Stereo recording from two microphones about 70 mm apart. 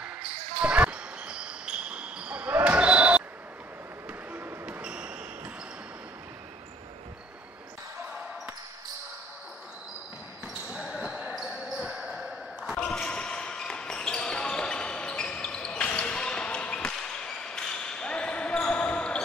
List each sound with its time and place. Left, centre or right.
0.6 s basketball bounce: centre
4.3 s basketball bounce: right
4.8 s basketball bounce: centre
11.0 s basketball bounce: centre
12.8 s basketball bounce: centre